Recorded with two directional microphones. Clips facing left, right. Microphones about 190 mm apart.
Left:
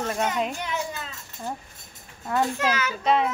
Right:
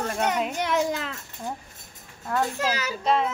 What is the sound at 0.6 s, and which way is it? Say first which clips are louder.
Speech: right 6 dB; 80° right.